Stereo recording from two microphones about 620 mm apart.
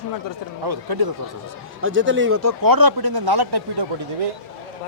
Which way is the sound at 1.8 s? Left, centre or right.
Centre.